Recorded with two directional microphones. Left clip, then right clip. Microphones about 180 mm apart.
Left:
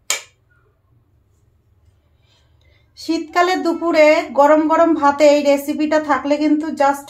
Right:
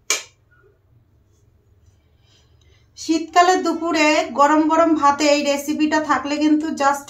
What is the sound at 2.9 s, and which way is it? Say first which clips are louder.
Speech: right 2 dB; 45° left (ahead or behind).